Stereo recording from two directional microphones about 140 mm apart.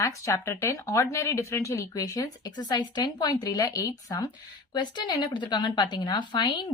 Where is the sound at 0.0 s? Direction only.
20° left (ahead or behind).